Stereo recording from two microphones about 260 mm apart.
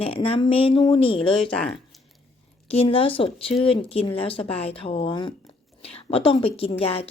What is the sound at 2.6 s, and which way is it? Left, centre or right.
A woman's voice, left.